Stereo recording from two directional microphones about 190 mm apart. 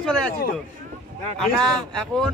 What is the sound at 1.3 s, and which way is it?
Speech, centre (ahead or behind).